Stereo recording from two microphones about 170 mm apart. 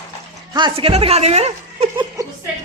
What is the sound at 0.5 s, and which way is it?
Speech, 30° right (ahead or behind).